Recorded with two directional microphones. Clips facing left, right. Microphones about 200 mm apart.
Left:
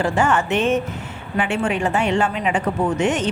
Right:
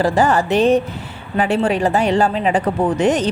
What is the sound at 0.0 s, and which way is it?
A woman's voice, 35° right (ahead or behind).